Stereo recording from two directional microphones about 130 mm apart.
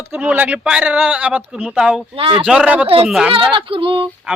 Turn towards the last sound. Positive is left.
turn(degrees=-40)  # may be behind; listen again after turning